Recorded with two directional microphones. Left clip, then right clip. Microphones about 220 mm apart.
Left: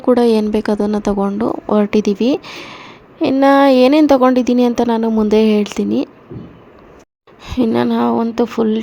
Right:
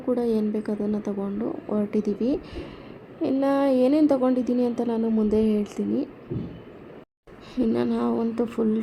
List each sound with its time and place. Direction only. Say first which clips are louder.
0.0 s a woman's voice: left 12 dB; 35° left (ahead or behind)
7.4 s speech: left 9 dB; 35° left (ahead or behind)